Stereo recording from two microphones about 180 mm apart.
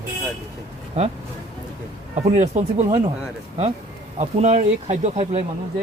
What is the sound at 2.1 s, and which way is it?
Speech, 40° right (ahead or behind).